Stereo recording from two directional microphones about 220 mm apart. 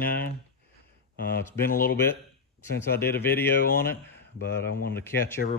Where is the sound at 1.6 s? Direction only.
40° left (ahead or behind).